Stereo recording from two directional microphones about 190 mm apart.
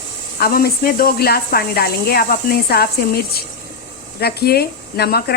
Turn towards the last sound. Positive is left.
turn(degrees=55)  # may be behind; listen again after turning